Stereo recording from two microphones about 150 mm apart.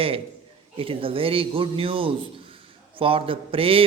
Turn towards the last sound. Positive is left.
turn(degrees=-40)  # may be behind; listen again after turning